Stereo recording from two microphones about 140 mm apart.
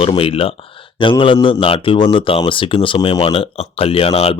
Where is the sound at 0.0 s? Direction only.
40° left (ahead or behind).